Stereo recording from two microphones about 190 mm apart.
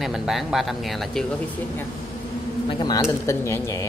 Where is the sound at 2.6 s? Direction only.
25° left (ahead or behind).